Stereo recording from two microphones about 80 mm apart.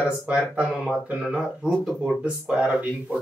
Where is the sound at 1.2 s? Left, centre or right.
Centre.